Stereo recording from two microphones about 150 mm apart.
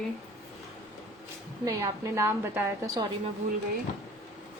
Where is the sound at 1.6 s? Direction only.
20° right (ahead or behind).